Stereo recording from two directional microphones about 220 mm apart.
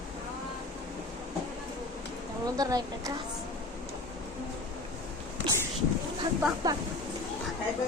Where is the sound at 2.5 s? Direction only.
15° right (ahead or behind).